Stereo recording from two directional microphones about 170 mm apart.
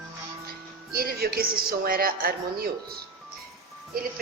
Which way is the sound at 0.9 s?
60° right (ahead or behind).